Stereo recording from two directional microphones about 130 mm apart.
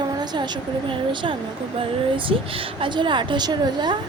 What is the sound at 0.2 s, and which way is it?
Speech, 35° right (ahead or behind).